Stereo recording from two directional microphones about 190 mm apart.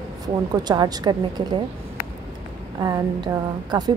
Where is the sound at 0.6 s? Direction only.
20° right (ahead or behind).